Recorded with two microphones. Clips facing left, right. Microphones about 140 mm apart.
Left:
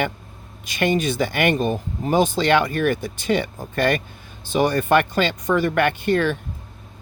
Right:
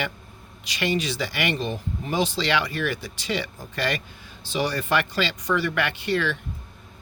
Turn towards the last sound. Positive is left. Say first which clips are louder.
# left 6 dB
turn(degrees=50)  # may be behind; listen again after turning